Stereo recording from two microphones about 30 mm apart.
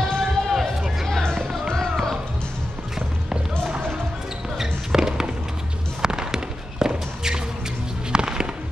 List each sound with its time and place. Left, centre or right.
0.2 s a sound: centre
4.6 s music: centre
6.0 s fireworks: right
8.1 s music: right